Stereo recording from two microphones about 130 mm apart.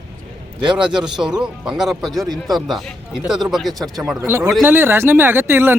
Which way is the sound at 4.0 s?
25° right (ahead or behind).